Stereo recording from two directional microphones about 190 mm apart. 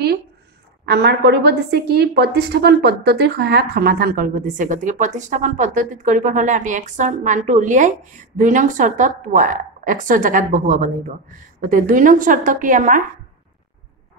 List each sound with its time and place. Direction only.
0.8 s a woman's voice: 60° right (ahead or behind); by 13.0 s 45° right (ahead or behind)